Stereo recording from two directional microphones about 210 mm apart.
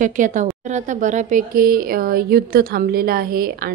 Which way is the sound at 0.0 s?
40° right (ahead or behind).